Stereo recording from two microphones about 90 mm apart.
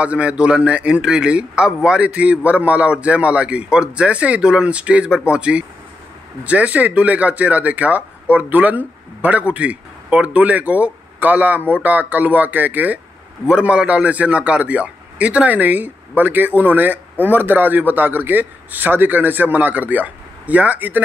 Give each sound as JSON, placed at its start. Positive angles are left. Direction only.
{"t": 0.0, "sound": "a man's voice", "side_deg": -15}